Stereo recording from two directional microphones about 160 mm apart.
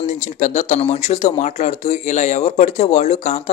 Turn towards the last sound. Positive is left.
turn(degrees=45)  # may be behind; listen again after turning